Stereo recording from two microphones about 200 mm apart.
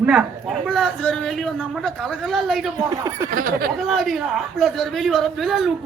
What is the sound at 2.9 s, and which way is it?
Speech, 15° right (ahead or behind).